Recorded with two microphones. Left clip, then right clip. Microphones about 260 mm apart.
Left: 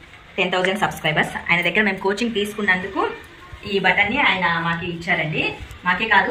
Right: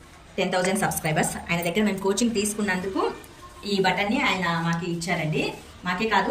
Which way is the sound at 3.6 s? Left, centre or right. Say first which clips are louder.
Left 6 dB; centre.